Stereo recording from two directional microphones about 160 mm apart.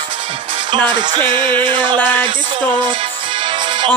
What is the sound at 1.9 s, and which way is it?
Speech, 10° left (ahead or behind).